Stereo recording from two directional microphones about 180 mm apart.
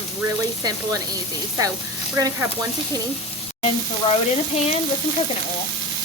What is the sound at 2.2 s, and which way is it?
Frying, 20° right (ahead or behind).